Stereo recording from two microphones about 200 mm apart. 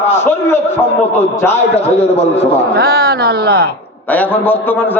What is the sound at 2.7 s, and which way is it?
Speech, 50° right (ahead or behind).